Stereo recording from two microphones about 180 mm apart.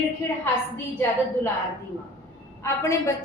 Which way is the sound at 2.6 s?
15° left (ahead or behind).